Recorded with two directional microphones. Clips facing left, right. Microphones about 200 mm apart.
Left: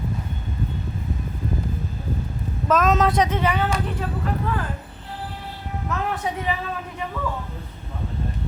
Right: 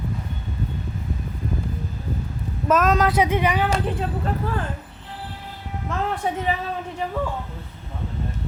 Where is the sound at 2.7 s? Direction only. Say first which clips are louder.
Even; 5° right (ahead or behind).